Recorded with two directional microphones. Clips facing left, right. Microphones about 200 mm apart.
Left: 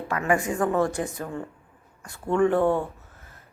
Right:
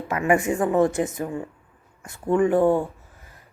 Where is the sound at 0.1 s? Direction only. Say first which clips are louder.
Right 4 dB; 20° right (ahead or behind).